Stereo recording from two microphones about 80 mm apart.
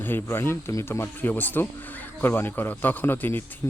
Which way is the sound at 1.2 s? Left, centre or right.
Left.